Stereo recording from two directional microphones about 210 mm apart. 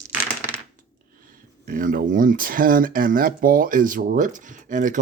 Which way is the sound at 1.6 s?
40° right (ahead or behind).